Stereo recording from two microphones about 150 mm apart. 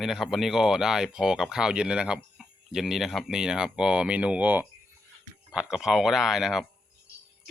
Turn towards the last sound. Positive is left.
turn(degrees=0)  # may be behind; listen again after turning